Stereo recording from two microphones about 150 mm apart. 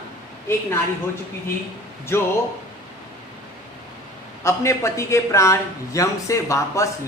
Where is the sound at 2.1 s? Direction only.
15° left (ahead or behind).